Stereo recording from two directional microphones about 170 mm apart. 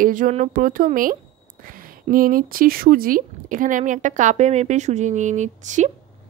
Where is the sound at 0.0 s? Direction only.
50° right (ahead or behind).